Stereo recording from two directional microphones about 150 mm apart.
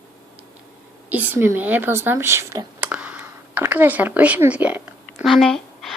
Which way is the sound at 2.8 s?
10° right (ahead or behind).